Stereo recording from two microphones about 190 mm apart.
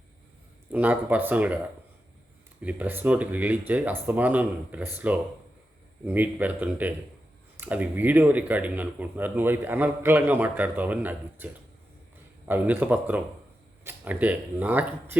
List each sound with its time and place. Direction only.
0.7 s speech: 10° right (ahead or behind)
2.6 s speech: 10° right (ahead or behind)